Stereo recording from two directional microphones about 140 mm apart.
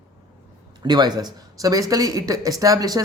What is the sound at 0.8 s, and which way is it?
Speech, 30° right (ahead or behind).